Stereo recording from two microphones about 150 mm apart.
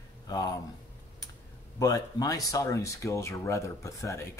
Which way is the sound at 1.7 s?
25° left (ahead or behind).